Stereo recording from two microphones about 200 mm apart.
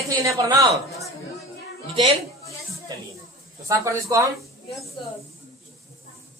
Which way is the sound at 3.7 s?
15° right (ahead or behind).